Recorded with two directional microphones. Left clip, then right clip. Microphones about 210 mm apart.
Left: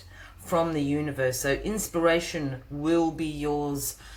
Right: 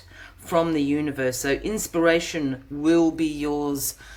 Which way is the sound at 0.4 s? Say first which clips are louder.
Right 4 dB; 40° right (ahead or behind).